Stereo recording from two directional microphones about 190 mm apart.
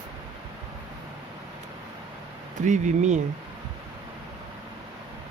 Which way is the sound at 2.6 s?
40° right (ahead or behind).